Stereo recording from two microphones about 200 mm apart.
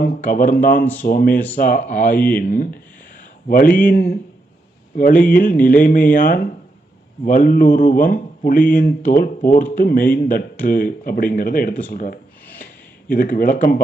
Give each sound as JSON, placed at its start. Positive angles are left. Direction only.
{"t": 0.3, "sound": "speech", "side_deg": 45}
{"t": 11.9, "sound": "a sound", "side_deg": 45}
{"t": 13.1, "sound": "speech", "side_deg": 45}